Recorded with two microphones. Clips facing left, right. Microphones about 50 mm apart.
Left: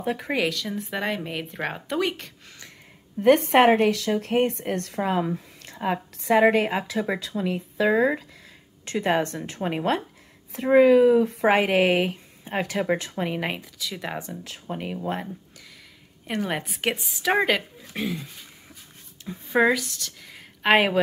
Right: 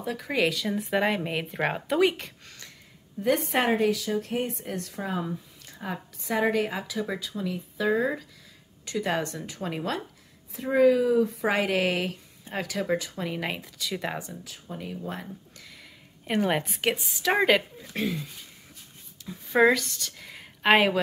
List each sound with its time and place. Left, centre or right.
0.0 s speech: left
0.4 s speech: centre
3.2 s a woman's voice: left
8.8 s a woman's voice: left
10.5 s a woman's voice: left
11.6 s speech: left
12.9 s a woman's voice: left
13.2 s speech: left
13.6 s speech: centre
14.4 s a woman's voice: left
16.3 s speech: centre
19.3 s speech: centre
19.6 s speech: centre